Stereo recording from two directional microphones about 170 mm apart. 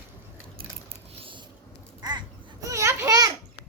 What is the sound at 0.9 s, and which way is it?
Mechanisms, 30° right (ahead or behind).